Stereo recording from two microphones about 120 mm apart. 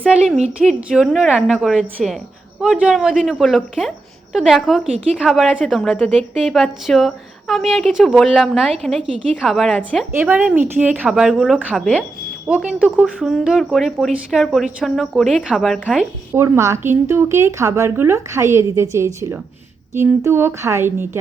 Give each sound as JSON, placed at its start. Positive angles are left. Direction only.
{"t": 0.1, "sound": "a woman's voice", "side_deg": -5}
{"t": 10.2, "sound": "a woman's voice", "side_deg": -15}
{"t": 16.3, "sound": "a woman's voice", "side_deg": -20}